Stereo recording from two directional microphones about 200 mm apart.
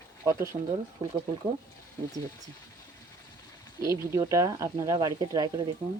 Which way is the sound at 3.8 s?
15° right (ahead or behind).